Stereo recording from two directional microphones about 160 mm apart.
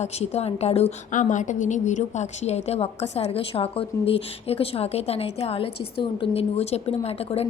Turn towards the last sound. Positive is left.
turn(degrees=40)  # may be behind; listen again after turning